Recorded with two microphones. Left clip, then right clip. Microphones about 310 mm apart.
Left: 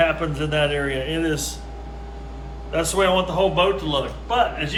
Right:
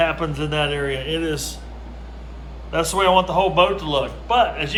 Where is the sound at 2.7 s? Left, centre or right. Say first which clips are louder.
Right 3 dB; centre.